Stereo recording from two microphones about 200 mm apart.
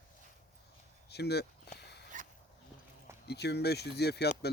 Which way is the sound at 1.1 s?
55° left (ahead or behind).